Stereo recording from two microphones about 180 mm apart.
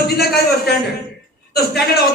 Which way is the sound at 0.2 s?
60° left (ahead or behind).